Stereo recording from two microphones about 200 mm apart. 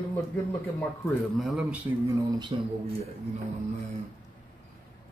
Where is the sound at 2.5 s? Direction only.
25° right (ahead or behind).